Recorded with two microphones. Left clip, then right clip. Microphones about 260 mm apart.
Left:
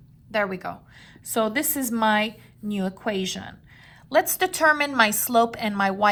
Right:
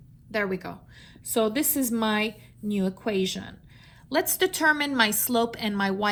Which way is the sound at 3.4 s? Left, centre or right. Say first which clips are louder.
Left 2 dB; left.